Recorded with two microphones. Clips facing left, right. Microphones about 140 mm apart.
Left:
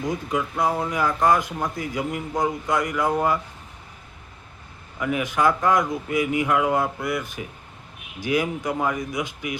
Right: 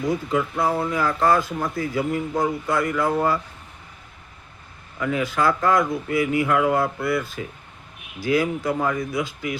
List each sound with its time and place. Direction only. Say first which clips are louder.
0.1 s speech: right 4 dB; 15° left (ahead or behind)
4.9 s speech: right 1 dB; 20° left (ahead or behind)